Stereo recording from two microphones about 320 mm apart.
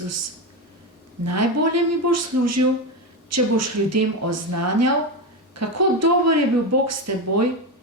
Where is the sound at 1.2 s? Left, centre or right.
Right.